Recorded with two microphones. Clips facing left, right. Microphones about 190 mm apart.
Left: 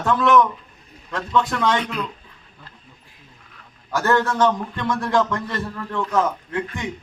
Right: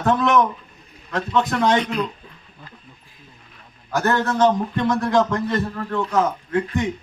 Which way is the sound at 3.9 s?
20° right (ahead or behind).